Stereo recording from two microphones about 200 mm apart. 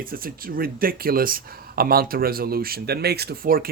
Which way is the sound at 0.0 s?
45° right (ahead or behind).